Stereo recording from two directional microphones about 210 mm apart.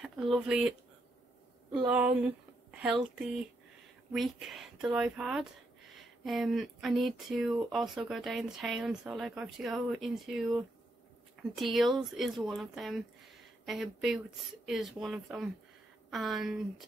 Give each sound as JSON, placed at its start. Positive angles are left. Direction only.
{"t": 0.0, "sound": "speech", "side_deg": 0}
{"t": 1.9, "sound": "speech", "side_deg": -5}